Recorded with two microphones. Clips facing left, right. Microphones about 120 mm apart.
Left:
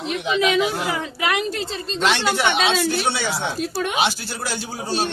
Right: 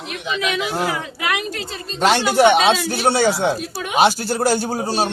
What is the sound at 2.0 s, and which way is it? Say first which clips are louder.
A man's voice: right 6 dB; 40° right (ahead or behind).